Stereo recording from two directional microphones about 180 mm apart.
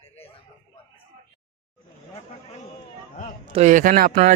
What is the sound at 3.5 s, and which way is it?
Speech, 45° right (ahead or behind).